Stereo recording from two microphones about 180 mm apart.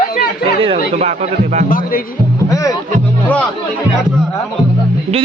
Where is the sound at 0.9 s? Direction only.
35° right (ahead or behind).